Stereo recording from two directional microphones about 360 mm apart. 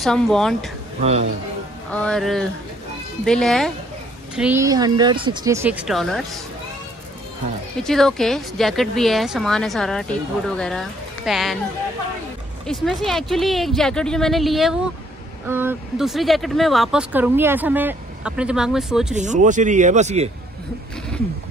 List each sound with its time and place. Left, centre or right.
0.0 s speech: centre
1.9 s speech: centre
7.8 s speech: centre
12.6 s speech: centre
19.1 s speech: centre